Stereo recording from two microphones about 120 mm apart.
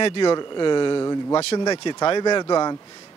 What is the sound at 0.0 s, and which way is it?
Speech, 45° left (ahead or behind).